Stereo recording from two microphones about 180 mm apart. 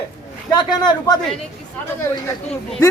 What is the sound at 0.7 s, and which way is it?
Speech, 20° left (ahead or behind).